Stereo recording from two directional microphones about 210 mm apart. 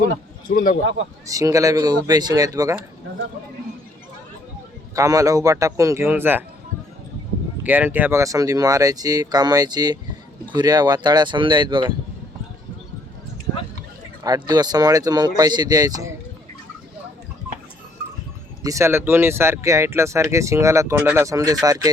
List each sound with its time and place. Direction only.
0.4 s a man's voice: 40° left (ahead or behind)
1.3 s speech: 15° right (ahead or behind)
4.9 s speech: 15° right (ahead or behind)
7.6 s speech: 10° right (ahead or behind)
14.3 s speech: 20° right (ahead or behind)
18.6 s speech: 15° right (ahead or behind)